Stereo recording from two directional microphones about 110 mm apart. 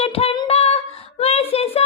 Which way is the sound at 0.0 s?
65° left (ahead or behind).